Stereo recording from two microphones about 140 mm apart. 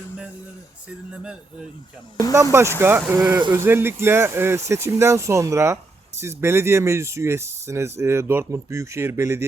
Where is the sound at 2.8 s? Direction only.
15° right (ahead or behind).